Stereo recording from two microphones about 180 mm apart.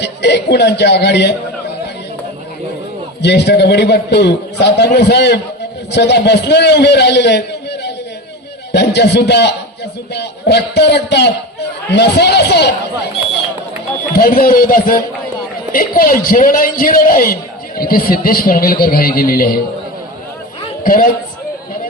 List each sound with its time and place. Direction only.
0.0 s a man's voice: 70° left (ahead or behind)
3.2 s a man's voice: 70° left (ahead or behind)
14.1 s a man's voice: 55° left (ahead or behind)
20.8 s a man's voice: 50° left (ahead or behind)